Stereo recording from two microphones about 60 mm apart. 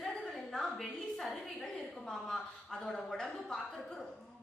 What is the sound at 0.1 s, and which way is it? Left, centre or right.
A woman's voice, centre.